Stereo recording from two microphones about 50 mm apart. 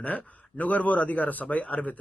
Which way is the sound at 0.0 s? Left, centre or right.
Left.